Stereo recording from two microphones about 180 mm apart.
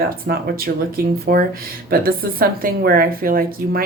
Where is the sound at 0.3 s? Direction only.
55° right (ahead or behind).